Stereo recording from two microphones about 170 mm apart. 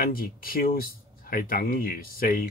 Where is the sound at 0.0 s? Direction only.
60° left (ahead or behind).